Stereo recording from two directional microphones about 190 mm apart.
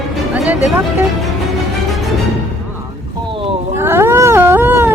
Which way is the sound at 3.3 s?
30° right (ahead or behind).